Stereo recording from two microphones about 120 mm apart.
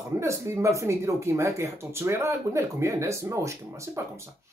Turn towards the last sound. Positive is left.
turn(degrees=-25)  # may be behind; listen again after turning